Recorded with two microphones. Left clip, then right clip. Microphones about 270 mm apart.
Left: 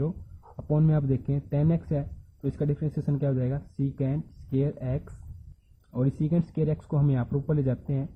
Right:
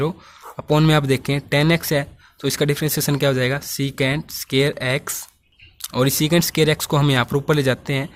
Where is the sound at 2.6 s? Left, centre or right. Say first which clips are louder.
Right 11 dB; right.